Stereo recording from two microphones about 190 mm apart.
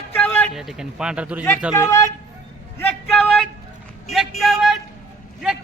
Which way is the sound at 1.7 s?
15° left (ahead or behind).